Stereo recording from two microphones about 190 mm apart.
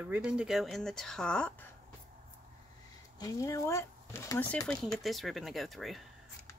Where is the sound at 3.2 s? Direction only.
20° left (ahead or behind); by 6.0 s centre (ahead or behind).